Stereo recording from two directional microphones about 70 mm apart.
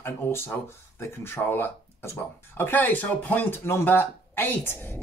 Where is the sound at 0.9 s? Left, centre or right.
Left.